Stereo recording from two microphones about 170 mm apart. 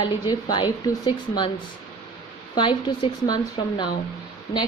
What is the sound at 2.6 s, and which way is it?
Speech, 30° left (ahead or behind).